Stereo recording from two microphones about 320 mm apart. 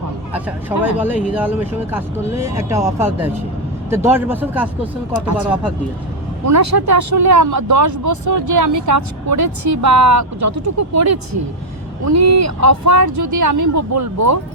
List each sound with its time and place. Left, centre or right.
0.3 s speech: centre
6.4 s speech: right